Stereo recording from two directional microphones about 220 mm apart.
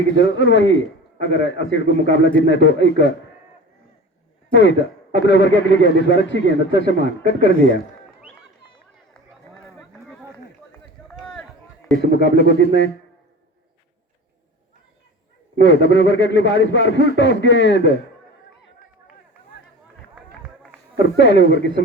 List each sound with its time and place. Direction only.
0.1 s a man's voice: 55° left (ahead or behind)
4.5 s a man's voice: 55° left (ahead or behind)
11.1 s a sound: centre (ahead or behind)
12.1 s speech: 50° left (ahead or behind)
15.6 s a man's voice: 50° left (ahead or behind)
21.2 s speech: 50° left (ahead or behind)